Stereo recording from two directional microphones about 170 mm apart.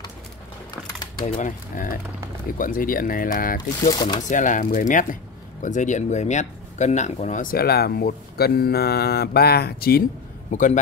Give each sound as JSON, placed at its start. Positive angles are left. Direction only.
{"t": 1.2, "sound": "speech", "side_deg": 40}
{"t": 1.7, "sound": "speech", "side_deg": 55}
{"t": 3.9, "sound": "speech", "side_deg": 25}
{"t": 4.3, "sound": "speech", "side_deg": 50}
{"t": 10.5, "sound": "speech", "side_deg": 45}